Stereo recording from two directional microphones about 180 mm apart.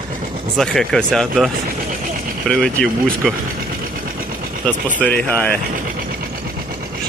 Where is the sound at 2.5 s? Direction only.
5° left (ahead or behind).